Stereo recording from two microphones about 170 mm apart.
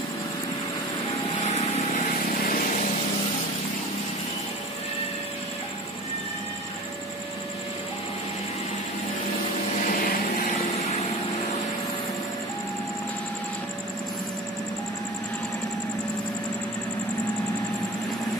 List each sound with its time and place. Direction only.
1.4 s vehicle: 40° left (ahead or behind)
9.8 s vehicle: 55° left (ahead or behind)